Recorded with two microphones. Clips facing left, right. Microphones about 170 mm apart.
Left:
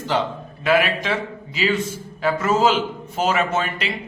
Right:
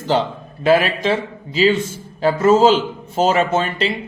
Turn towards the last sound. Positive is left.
turn(degrees=-30)  # may be behind; listen again after turning